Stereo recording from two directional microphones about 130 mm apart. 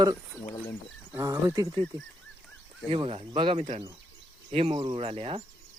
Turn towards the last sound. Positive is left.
turn(degrees=-45)  # may be behind; listen again after turning